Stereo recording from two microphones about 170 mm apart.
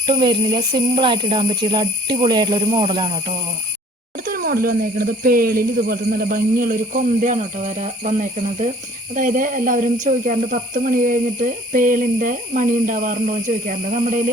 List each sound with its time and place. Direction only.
0.0 s speech: 30° right (ahead or behind)
4.3 s speech: 60° right (ahead or behind)